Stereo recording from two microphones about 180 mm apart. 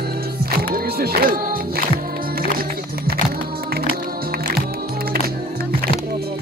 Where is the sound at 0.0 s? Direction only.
60° right (ahead or behind).